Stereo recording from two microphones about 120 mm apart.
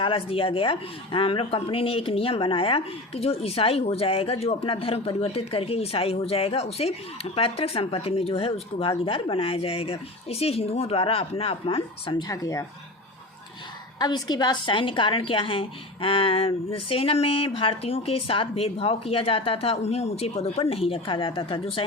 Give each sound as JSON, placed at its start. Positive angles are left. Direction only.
{"t": 0.0, "sound": "speech", "side_deg": 50}
{"t": 12.3, "sound": "speech", "side_deg": 30}
{"t": 14.0, "sound": "speech", "side_deg": 35}